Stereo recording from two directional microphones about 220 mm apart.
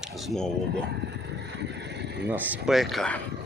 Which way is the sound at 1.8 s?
50° right (ahead or behind).